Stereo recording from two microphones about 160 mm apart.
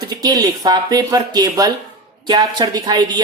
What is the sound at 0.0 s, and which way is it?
A woman's voice, 25° right (ahead or behind).